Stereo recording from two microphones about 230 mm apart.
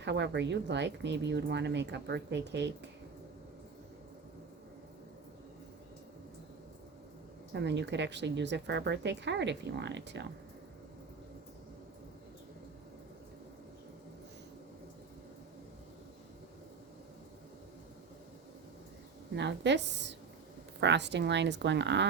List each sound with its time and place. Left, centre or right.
0.0 s speech: right
7.5 s speech: right
19.4 s speech: right